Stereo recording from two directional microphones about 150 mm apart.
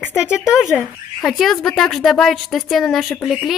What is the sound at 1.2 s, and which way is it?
A woman's voice, centre (ahead or behind).